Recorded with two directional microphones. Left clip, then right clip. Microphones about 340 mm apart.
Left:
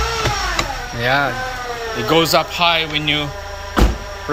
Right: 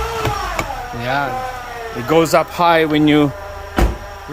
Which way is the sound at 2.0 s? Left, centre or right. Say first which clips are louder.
Right 1 dB; centre.